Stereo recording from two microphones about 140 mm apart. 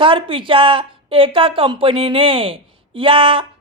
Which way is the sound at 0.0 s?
40° right (ahead or behind).